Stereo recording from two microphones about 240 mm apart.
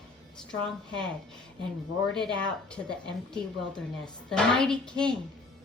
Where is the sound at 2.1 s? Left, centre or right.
Centre.